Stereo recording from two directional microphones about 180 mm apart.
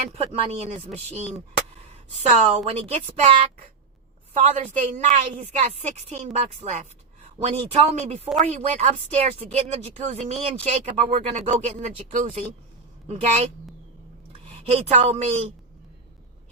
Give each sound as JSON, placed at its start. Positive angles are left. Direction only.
{"t": 0.1, "sound": "speech", "side_deg": -35}
{"t": 1.9, "sound": "speech", "side_deg": -40}
{"t": 4.4, "sound": "speech", "side_deg": -40}
{"t": 14.7, "sound": "speech", "side_deg": -35}